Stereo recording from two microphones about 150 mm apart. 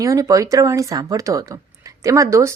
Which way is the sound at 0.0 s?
20° right (ahead or behind).